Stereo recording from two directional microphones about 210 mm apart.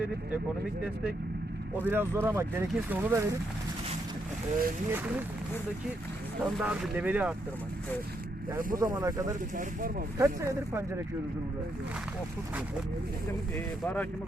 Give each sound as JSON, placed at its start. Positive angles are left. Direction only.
{"t": 1.8, "sound": "speech", "side_deg": -10}
{"t": 4.9, "sound": "speech", "side_deg": -10}
{"t": 6.4, "sound": "speech", "side_deg": -5}
{"t": 8.5, "sound": "speech", "side_deg": -15}
{"t": 13.8, "sound": "speech", "side_deg": 5}